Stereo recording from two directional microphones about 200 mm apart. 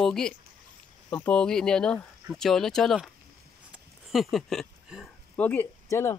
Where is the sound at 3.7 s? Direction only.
Centre (ahead or behind).